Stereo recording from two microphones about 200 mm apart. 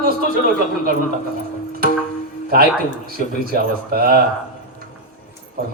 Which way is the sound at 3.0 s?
50° right (ahead or behind).